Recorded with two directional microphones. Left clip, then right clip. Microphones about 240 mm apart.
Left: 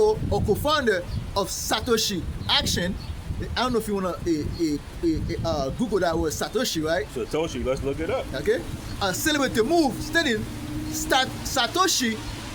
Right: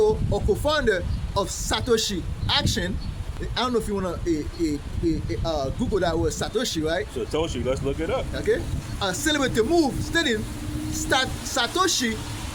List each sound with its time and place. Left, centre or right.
0.0 s speech: centre
7.2 s speech: centre
8.3 s speech: centre